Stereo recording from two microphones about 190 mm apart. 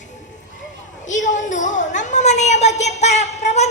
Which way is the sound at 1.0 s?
40° left (ahead or behind).